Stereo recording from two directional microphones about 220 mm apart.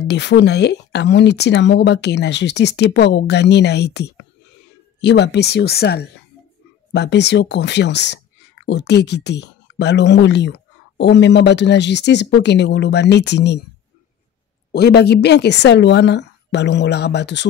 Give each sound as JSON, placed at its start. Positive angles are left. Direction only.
{"t": 0.1, "sound": "speech", "side_deg": 50}
{"t": 14.7, "sound": "speech", "side_deg": 50}